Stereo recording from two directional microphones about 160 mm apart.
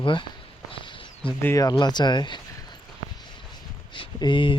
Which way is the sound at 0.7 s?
30° left (ahead or behind).